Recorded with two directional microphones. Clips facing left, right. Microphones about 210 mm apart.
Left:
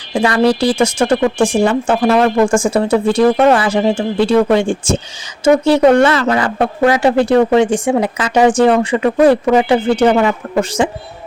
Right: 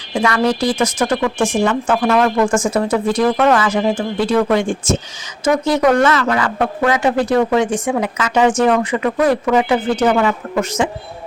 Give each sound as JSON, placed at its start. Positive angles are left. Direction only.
{"t": 0.1, "sound": "speech", "side_deg": 30}